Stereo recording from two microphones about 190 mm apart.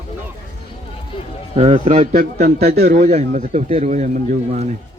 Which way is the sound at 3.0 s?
40° right (ahead or behind).